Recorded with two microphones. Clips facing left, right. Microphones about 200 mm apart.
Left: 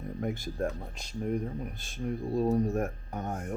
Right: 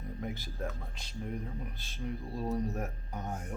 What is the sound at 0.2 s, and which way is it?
Speech, 50° left (ahead or behind).